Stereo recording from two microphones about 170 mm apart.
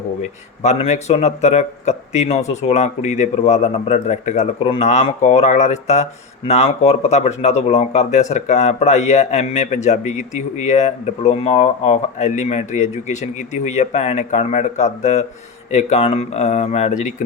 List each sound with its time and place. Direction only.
0.2 s speech: 40° left (ahead or behind)